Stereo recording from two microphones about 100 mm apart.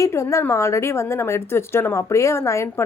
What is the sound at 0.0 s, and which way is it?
A woman's voice, 30° left (ahead or behind).